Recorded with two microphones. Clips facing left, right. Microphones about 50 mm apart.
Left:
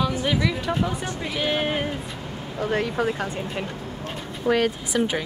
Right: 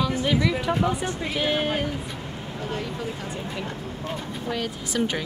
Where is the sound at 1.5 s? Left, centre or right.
Left.